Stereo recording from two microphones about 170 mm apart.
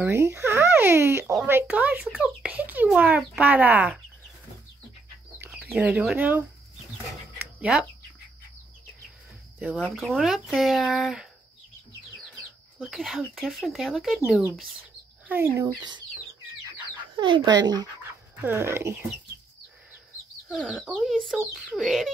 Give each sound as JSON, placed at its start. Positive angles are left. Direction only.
{"t": 0.0, "sound": "a child's voice", "side_deg": -15}
{"t": 5.7, "sound": "speech", "side_deg": -10}
{"t": 9.6, "sound": "speech", "side_deg": 0}
{"t": 12.7, "sound": "speech", "side_deg": 0}
{"t": 15.2, "sound": "speech", "side_deg": -10}
{"t": 17.2, "sound": "speech", "side_deg": -25}
{"t": 20.4, "sound": "speech", "side_deg": -5}